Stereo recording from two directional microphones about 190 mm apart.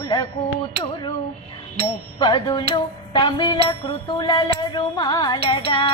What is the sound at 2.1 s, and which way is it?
Music, 25° left (ahead or behind).